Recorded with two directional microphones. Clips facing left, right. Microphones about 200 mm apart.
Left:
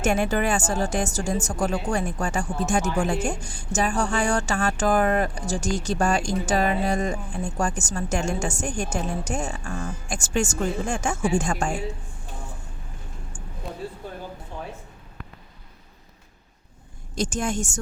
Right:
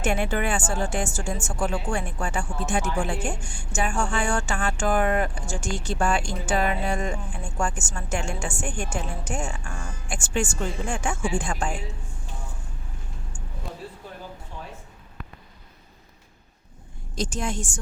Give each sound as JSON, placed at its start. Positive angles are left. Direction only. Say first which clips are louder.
{"t": 0.0, "sound": "a woman's voice", "louder": "left 3 dB", "side_deg": 40}
{"t": 13.6, "sound": "a sound", "louder": "left 3 dB", "side_deg": 0}
{"t": 17.2, "sound": "a woman's voice", "louder": "left 3 dB", "side_deg": 50}